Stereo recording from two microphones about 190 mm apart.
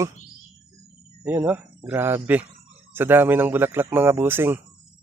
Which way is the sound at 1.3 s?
10° right (ahead or behind).